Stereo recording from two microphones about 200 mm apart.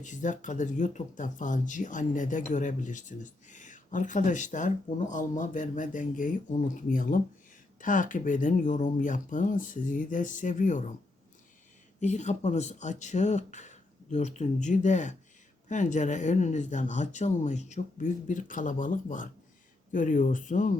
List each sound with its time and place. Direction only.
0.0 s speech: 40° left (ahead or behind)
11.9 s speech: 35° left (ahead or behind)